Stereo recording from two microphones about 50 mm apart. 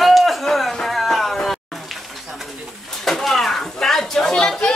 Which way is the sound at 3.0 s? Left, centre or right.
Centre.